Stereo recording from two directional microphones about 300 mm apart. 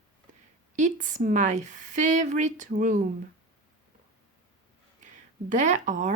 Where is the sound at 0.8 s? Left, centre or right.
Right.